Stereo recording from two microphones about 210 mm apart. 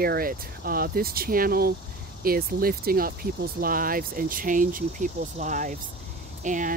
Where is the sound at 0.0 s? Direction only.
45° right (ahead or behind).